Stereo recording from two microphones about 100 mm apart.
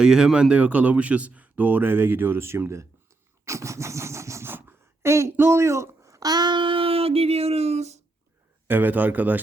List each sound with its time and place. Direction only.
0.0 s speech: 5° right (ahead or behind); by 7.9 s 90° right
8.6 s speech: 20° right (ahead or behind)